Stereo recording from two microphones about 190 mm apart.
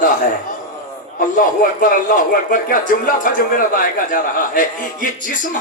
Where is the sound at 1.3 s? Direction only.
45° left (ahead or behind).